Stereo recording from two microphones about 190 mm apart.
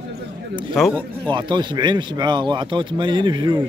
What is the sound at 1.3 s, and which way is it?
Speech, 25° right (ahead or behind).